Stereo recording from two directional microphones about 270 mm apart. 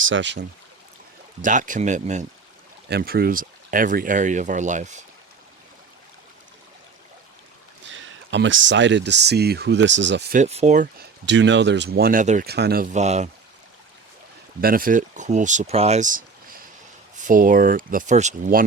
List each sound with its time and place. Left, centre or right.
0.0 s speech: right
1.4 s speech: right
7.9 s speech: right
10.3 s speech: right
11.3 s speech: right
14.6 s speech: right